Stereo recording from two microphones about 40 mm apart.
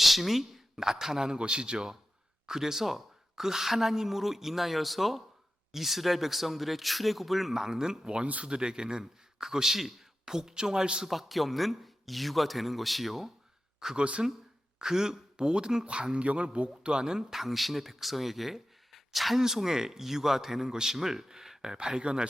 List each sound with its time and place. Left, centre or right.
0.0 s a man's voice: centre; by 1.9 s right
2.5 s speech: centre
8.2 s speech: right
8.4 s a man's voice: right
11.1 s speech: centre
13.7 s speech: centre
14.0 s speech: right
14.8 s a man's voice: centre
17.4 s a man's voice: centre; by 22.3 s right